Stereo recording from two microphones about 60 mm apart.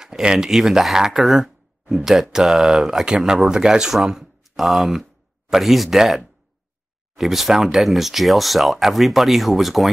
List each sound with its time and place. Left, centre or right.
0.0 s speech: centre